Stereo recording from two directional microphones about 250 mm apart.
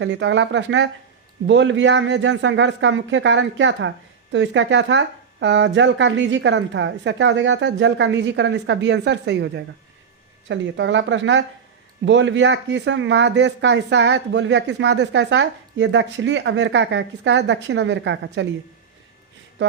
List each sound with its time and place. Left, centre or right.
0.0 s speech: right